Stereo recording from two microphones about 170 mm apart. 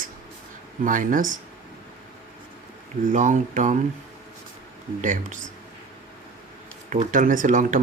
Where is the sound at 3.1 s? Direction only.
45° right (ahead or behind).